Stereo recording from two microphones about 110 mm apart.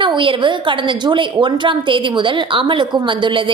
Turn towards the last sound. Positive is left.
turn(degrees=-50)  # may be behind; listen again after turning